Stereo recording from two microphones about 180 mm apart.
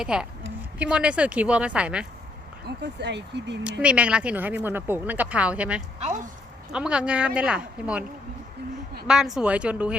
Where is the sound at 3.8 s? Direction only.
5° right (ahead or behind).